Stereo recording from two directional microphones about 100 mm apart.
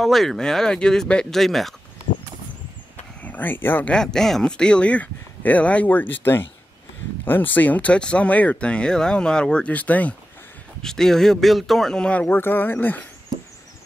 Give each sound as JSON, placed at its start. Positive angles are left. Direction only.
{"t": 0.0, "sound": "speech", "side_deg": 0}
{"t": 3.2, "sound": "speech", "side_deg": 15}
{"t": 3.9, "sound": "speech", "side_deg": 5}
{"t": 10.8, "sound": "speech", "side_deg": 5}